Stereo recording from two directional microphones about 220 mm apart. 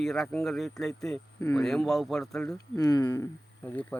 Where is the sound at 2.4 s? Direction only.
15° left (ahead or behind).